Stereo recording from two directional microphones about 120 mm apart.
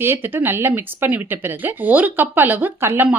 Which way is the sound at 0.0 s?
20° right (ahead or behind).